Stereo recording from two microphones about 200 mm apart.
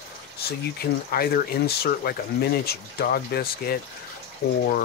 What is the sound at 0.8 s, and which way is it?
Speech, 50° left (ahead or behind).